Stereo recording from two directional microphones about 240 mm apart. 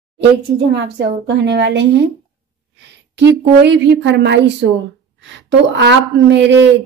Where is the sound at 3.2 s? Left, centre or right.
Right.